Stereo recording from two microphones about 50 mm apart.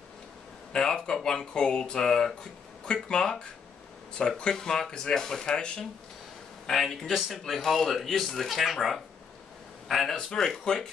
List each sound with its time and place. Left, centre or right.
0.7 s a man's voice: centre